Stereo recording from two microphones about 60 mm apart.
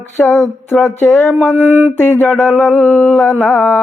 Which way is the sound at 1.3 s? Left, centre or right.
Right.